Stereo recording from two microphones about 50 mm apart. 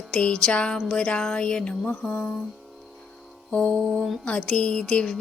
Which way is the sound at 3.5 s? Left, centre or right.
Centre.